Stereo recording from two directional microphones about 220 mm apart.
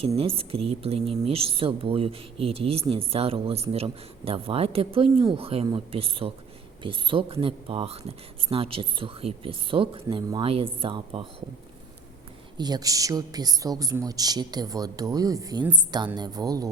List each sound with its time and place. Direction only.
0.2 s speech: 25° right (ahead or behind)
12.5 s speech: 20° right (ahead or behind)